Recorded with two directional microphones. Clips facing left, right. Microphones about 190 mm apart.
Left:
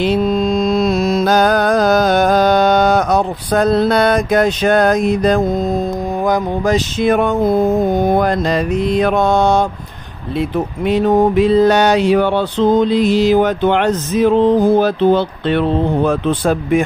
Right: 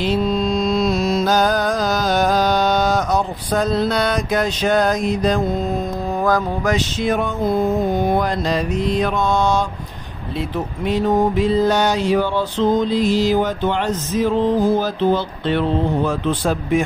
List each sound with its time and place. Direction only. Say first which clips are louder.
0.0 s mantra: left 4 dB; 55° left (ahead or behind)
7.0 s mantra: left 6 dB; 60° left (ahead or behind)
7.9 s mantra: left 4 dB; 45° left (ahead or behind)
10.9 s a sound: left 4 dB; 65° left (ahead or behind)